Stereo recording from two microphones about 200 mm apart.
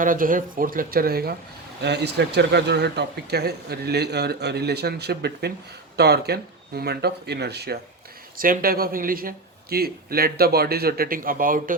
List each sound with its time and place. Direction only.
0.0 s speech: 45° right (ahead or behind)